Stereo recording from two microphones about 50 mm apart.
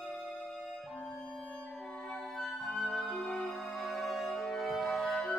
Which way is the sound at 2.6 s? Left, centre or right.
Centre.